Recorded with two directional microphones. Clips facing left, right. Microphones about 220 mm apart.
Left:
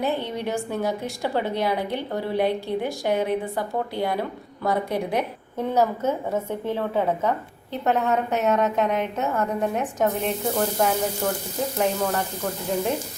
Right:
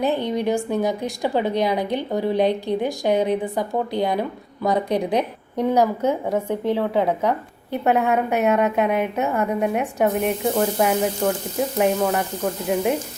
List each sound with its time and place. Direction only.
0.0 s a woman's voice: 15° right (ahead or behind)